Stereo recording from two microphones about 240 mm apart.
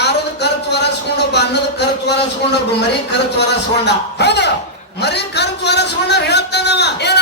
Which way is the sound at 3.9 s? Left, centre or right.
Left.